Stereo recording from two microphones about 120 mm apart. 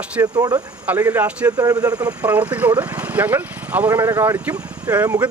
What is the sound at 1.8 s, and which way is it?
Speech, 10° right (ahead or behind).